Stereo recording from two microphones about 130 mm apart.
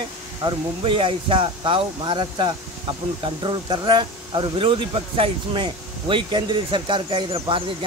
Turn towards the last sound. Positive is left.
turn(degrees=-40)  # may be behind; listen again after turning